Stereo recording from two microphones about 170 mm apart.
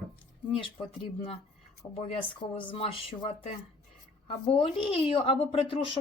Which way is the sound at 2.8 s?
30° left (ahead or behind).